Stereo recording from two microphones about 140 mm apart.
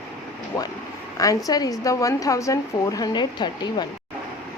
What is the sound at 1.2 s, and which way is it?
A woman's voice, 25° left (ahead or behind).